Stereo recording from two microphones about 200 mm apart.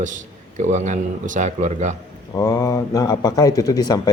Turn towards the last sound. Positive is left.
turn(degrees=20)  # may be behind; listen again after turning